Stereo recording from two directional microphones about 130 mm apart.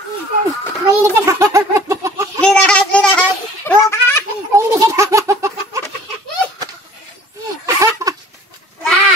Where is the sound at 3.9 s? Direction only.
20° left (ahead or behind).